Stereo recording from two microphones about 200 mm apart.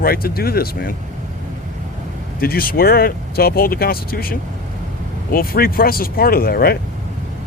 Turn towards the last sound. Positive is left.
turn(degrees=50)  # may be behind; listen again after turning